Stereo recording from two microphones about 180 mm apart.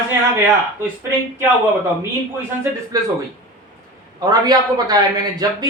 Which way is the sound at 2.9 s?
20° right (ahead or behind).